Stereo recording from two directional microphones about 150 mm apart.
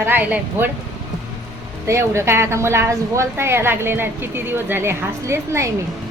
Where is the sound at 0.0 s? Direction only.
10° right (ahead or behind).